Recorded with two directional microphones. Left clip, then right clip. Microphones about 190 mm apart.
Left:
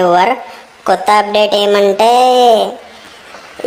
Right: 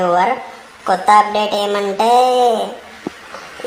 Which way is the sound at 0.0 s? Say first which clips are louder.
Left 4 dB; 40° left (ahead or behind).